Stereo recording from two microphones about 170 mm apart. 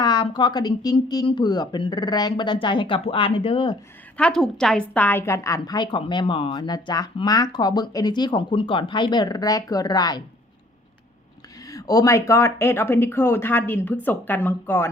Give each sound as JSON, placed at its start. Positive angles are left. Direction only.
{"t": 0.0, "sound": "a woman's voice", "side_deg": 25}
{"t": 4.2, "sound": "a woman's voice", "side_deg": 5}
{"t": 11.7, "sound": "speech", "side_deg": 20}